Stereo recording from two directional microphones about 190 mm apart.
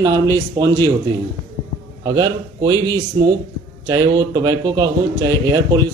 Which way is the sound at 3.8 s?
20° right (ahead or behind).